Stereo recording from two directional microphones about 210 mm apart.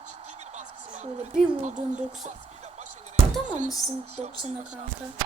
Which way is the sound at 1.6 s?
35° right (ahead or behind).